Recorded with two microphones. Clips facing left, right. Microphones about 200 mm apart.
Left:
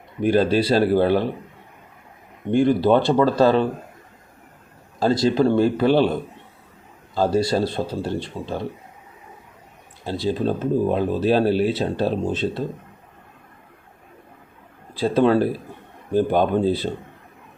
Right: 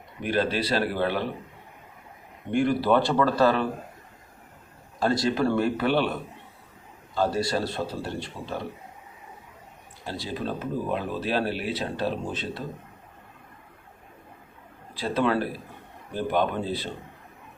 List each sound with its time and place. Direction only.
0.2 s speech: 35° left (ahead or behind)
2.5 s speech: 25° left (ahead or behind)
4.9 s speech: 30° left (ahead or behind)
10.1 s speech: 30° left (ahead or behind)
14.9 s speech: 30° left (ahead or behind)